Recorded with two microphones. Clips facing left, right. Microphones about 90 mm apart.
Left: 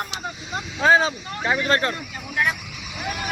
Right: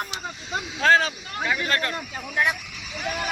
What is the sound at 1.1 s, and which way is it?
Speech, 30° left (ahead or behind).